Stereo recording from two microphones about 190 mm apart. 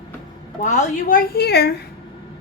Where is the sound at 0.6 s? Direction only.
45° left (ahead or behind).